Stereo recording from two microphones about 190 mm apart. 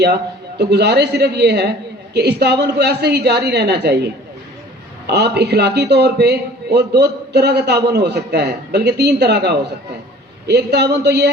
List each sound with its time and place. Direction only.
0.6 s a man's voice: 65° right (ahead or behind)